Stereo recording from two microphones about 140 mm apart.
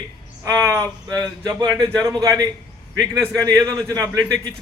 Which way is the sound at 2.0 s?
25° right (ahead or behind).